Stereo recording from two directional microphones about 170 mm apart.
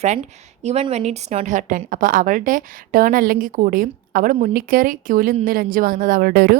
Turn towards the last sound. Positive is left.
turn(degrees=-65)  # may be behind; listen again after turning